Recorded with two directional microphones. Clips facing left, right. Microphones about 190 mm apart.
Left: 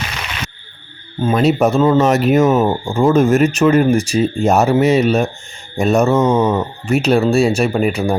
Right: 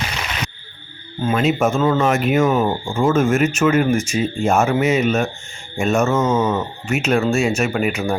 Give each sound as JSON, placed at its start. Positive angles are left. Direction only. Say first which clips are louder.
{"t": 1.3, "sound": "speech", "louder": "left 4 dB", "side_deg": 35}